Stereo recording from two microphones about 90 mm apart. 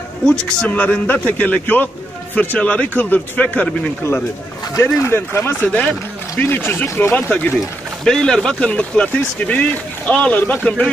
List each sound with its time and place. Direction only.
0.6 s speech: 15° left (ahead or behind)
4.8 s speech: 25° left (ahead or behind)
8.0 s speech: 5° left (ahead or behind)